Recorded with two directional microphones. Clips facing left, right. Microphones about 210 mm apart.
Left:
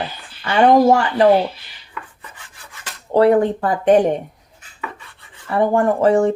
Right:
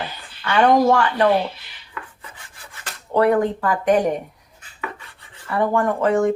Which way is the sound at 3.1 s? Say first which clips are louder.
Left 4 dB; 30° left (ahead or behind).